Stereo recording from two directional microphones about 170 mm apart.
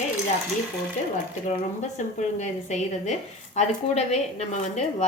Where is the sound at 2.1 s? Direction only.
45° left (ahead or behind).